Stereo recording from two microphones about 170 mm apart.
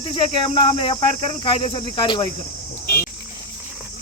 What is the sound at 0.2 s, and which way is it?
Speech, 30° left (ahead or behind).